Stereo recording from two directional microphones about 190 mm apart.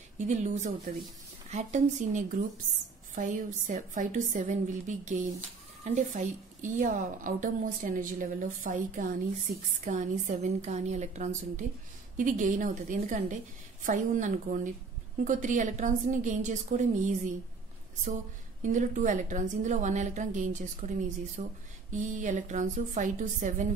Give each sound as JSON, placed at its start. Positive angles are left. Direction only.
{"t": 0.3, "sound": "a woman's voice", "side_deg": -40}